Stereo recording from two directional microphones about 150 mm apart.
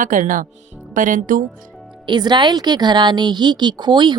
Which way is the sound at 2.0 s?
30° right (ahead or behind).